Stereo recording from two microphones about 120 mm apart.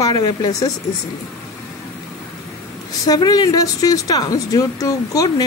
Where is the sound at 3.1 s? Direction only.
30° left (ahead or behind).